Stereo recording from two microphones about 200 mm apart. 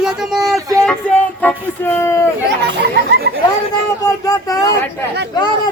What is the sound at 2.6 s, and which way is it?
Speech, 60° right (ahead or behind).